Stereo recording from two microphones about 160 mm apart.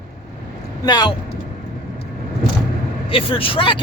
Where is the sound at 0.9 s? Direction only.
25° left (ahead or behind).